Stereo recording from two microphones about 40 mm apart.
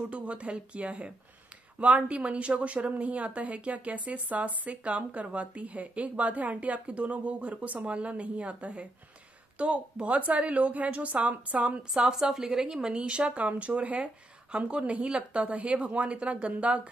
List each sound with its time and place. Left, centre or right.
0.1 s a woman's voice: right
11.9 s a woman's voice: centre
13.4 s a woman's voice: right